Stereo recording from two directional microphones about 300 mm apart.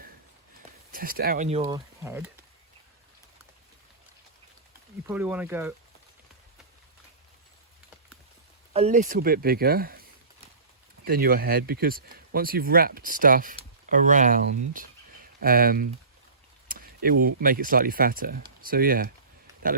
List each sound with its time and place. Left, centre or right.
0.9 s speech: right
1.6 s speech: centre
5.0 s speech: centre
8.7 s speech: right